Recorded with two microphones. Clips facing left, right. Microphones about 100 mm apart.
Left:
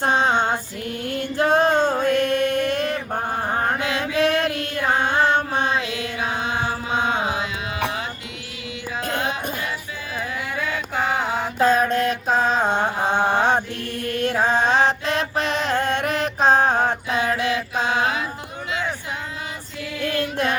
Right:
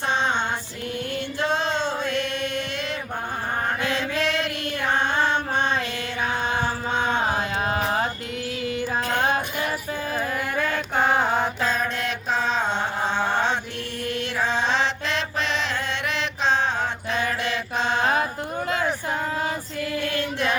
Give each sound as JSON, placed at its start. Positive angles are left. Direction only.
{"t": 0.0, "sound": "music", "side_deg": 45}
{"t": 1.4, "sound": "a sound", "side_deg": 50}
{"t": 4.2, "sound": "female singing", "side_deg": 45}
{"t": 7.0, "sound": "carnatic music", "side_deg": -45}
{"t": 9.1, "sound": "music", "side_deg": -50}
{"t": 10.6, "sound": "chant", "side_deg": 5}
{"t": 11.6, "sound": "mantra", "side_deg": 45}
{"t": 18.0, "sound": "music", "side_deg": -45}